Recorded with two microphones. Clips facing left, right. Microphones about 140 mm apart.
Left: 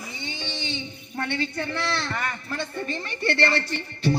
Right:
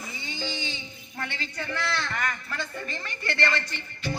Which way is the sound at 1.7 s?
30° left (ahead or behind).